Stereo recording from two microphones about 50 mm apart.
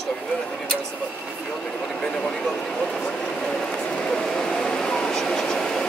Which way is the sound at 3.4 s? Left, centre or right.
Centre.